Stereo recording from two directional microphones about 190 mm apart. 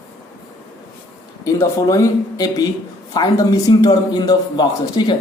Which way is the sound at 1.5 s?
15° left (ahead or behind).